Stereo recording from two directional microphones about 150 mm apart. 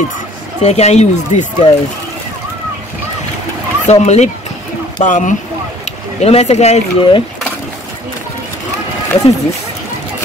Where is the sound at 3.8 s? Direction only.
50° left (ahead or behind).